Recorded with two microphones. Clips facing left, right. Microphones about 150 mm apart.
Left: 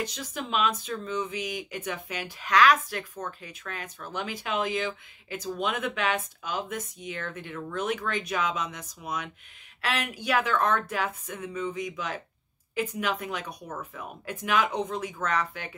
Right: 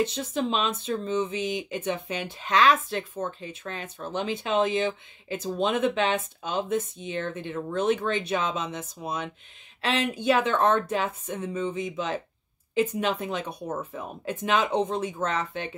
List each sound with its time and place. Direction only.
0.0 s speech: 25° right (ahead or behind)